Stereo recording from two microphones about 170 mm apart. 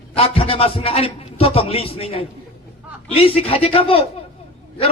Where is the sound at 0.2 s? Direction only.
35° left (ahead or behind).